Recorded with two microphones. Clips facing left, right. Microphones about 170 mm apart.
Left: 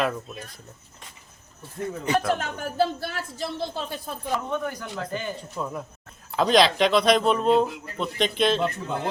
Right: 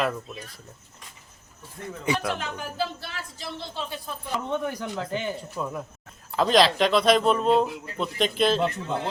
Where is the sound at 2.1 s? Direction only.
50° left (ahead or behind).